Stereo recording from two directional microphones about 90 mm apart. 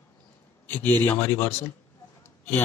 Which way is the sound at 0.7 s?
20° left (ahead or behind).